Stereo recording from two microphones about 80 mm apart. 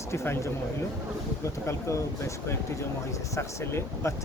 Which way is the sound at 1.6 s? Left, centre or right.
Left.